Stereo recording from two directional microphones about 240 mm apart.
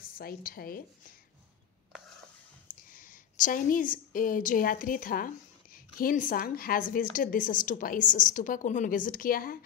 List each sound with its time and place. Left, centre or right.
0.0 s a woman's voice: left
2.7 s a woman's voice: left